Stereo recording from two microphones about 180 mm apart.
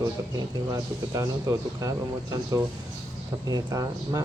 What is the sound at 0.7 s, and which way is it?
Speech, 20° right (ahead or behind).